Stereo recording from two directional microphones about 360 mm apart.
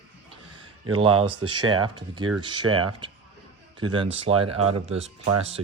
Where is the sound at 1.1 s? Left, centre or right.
Right.